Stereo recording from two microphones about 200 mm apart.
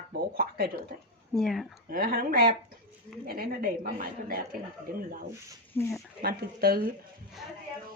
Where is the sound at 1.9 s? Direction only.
45° right (ahead or behind).